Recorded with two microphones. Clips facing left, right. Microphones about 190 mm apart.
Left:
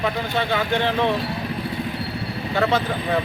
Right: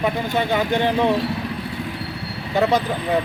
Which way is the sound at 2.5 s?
15° right (ahead or behind).